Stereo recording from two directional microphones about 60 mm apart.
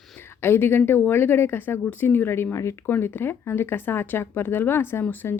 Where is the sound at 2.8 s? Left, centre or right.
Left.